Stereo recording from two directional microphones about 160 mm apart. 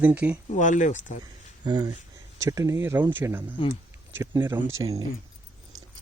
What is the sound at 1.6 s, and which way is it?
Speech, 25° right (ahead or behind).